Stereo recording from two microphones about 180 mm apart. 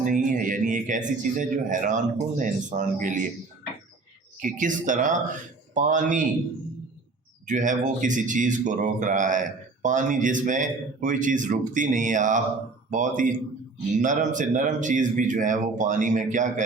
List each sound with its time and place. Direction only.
0.0 s speech: 45° right (ahead or behind)
4.4 s speech: 45° right (ahead or behind)
7.4 s speech: 45° right (ahead or behind)